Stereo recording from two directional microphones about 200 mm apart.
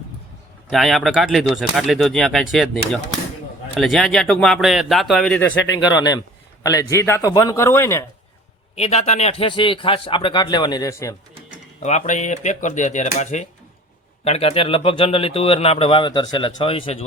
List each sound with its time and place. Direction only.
0.7 s speech: centre (ahead or behind)
5.9 s a man's voice: 20° left (ahead or behind)
8.7 s speech: 30° left (ahead or behind); by 11.1 s 15° left (ahead or behind)
11.8 s speech: 35° left (ahead or behind)